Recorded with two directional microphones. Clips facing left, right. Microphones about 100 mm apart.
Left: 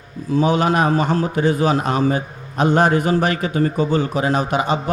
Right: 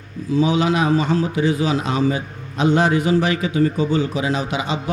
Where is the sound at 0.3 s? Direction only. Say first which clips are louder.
Left 1 dB; 50° left (ahead or behind).